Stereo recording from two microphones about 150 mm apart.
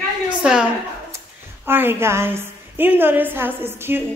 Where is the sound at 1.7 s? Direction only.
15° right (ahead or behind).